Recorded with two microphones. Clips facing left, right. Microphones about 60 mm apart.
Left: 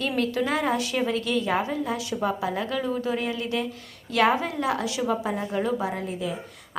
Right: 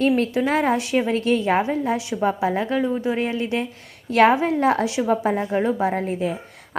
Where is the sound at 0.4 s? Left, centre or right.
Right.